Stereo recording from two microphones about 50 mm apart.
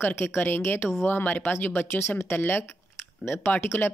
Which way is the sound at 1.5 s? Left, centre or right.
Left.